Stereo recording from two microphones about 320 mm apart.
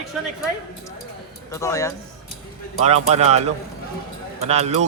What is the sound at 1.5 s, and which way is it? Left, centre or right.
Speech, centre.